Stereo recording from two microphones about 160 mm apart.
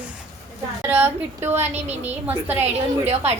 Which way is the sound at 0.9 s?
10° right (ahead or behind).